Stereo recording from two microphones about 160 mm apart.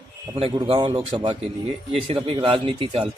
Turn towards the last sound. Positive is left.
turn(degrees=-35)  # may be behind; listen again after turning